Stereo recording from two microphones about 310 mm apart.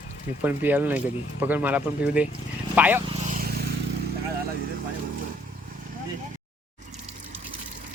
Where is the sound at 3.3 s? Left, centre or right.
Right.